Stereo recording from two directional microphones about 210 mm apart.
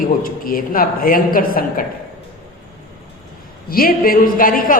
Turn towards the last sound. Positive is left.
turn(degrees=40)  # may be behind; listen again after turning